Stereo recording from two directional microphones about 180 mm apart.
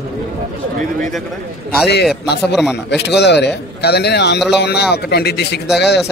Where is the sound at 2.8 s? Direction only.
70° left (ahead or behind).